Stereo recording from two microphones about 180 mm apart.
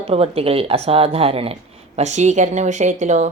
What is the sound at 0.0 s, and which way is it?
Speech, 35° right (ahead or behind).